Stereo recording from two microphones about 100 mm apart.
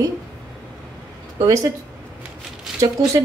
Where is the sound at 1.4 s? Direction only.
35° right (ahead or behind).